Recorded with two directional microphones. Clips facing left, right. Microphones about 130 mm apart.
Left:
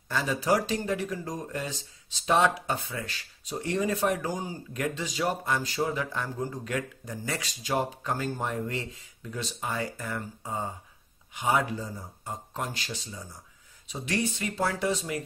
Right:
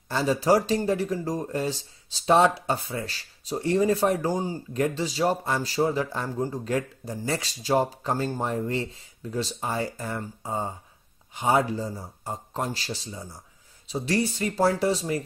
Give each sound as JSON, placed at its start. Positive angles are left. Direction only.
{"t": 0.1, "sound": "speech", "side_deg": -35}